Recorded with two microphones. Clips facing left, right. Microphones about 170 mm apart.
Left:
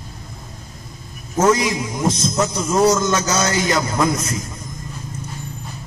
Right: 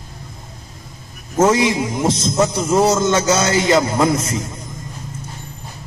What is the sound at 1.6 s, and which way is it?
A man's voice, 25° right (ahead or behind).